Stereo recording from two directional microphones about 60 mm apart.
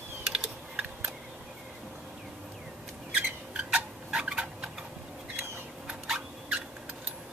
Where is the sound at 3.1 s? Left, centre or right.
Centre.